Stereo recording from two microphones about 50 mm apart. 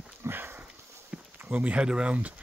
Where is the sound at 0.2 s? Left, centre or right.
Right.